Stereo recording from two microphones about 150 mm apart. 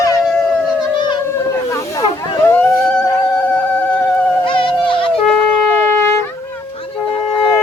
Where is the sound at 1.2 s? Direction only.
20° left (ahead or behind).